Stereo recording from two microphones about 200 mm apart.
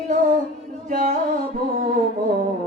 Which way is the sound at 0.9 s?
40° right (ahead or behind).